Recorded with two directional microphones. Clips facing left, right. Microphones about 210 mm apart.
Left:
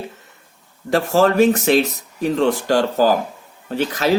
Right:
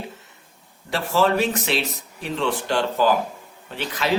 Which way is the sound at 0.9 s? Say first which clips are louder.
Left 5 dB; 45° left (ahead or behind).